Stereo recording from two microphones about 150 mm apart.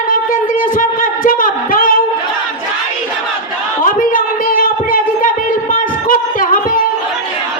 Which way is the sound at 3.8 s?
65° left (ahead or behind).